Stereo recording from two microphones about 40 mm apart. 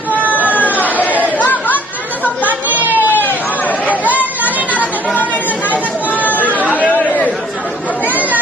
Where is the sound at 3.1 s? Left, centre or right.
Left.